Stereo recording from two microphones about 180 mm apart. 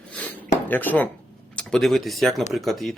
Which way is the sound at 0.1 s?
10° left (ahead or behind).